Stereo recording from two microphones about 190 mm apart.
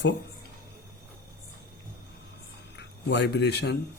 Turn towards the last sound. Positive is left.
turn(degrees=60)  # may be behind; listen again after turning